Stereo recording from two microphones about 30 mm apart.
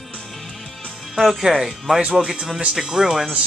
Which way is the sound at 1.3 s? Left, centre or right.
Right.